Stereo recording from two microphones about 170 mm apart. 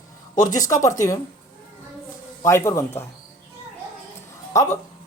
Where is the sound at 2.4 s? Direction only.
15° left (ahead or behind).